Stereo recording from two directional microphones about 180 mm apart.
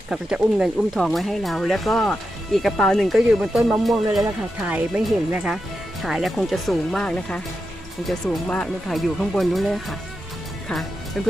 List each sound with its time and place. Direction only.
0.1 s speech: 5° right (ahead or behind)